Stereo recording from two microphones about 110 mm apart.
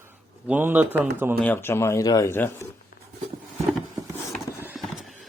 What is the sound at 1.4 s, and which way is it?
Speech, 20° left (ahead or behind).